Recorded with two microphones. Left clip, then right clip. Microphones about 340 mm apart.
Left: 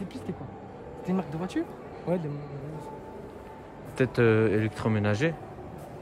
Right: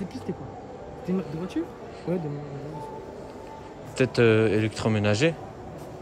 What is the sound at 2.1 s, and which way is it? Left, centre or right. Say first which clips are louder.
Speech: even; centre.